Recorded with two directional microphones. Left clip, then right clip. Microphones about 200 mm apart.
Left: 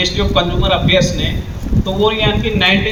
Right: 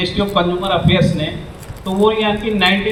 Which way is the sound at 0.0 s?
45° left (ahead or behind).